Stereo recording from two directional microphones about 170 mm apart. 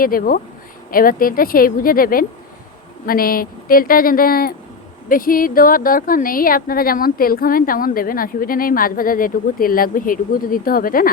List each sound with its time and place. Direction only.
0.0 s a woman's voice: 55° left (ahead or behind)